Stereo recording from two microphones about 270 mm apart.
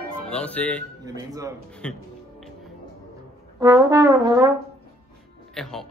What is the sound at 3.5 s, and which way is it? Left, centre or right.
Brass instrument, centre.